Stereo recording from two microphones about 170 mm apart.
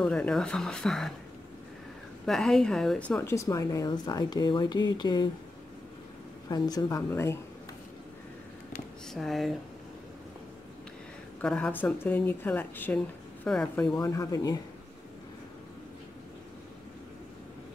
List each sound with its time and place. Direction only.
0.0 s speech: 5° left (ahead or behind)
2.2 s a woman's voice: 5° left (ahead or behind); by 5.3 s 25° left (ahead or behind)
6.5 s a woman's voice: 25° left (ahead or behind)
9.1 s speech: centre (ahead or behind)
11.4 s speech: 5° left (ahead or behind)
14.0 s a woman's voice: 20° left (ahead or behind)